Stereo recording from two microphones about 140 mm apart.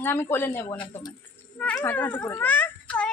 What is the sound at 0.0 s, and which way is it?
A child's voice, 15° left (ahead or behind).